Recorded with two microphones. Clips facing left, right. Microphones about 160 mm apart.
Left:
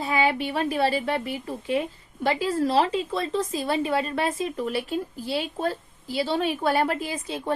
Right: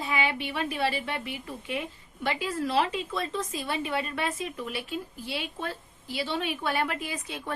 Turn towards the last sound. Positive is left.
turn(degrees=30)  # may be behind; listen again after turning